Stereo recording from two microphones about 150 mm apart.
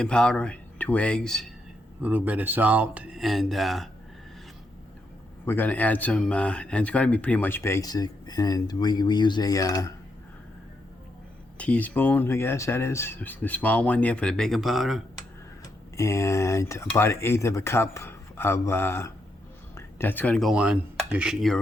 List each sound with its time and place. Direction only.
0.0 s speech: 5° left (ahead or behind)
2.0 s speech: 10° right (ahead or behind)
5.5 s speech: 10° left (ahead or behind)
11.5 s speech: 10° left (ahead or behind)
15.6 s speech: 20° left (ahead or behind); by 21.6 s centre (ahead or behind)